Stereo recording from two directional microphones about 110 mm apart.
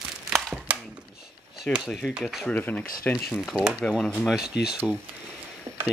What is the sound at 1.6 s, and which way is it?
Speech, centre (ahead or behind).